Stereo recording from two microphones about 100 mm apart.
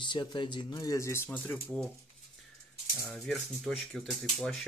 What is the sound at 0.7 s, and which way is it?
Speech, 35° left (ahead or behind).